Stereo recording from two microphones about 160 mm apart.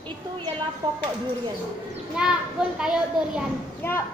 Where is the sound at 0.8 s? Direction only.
25° right (ahead or behind).